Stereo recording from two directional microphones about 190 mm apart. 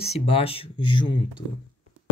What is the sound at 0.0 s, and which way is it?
Speech, 35° left (ahead or behind).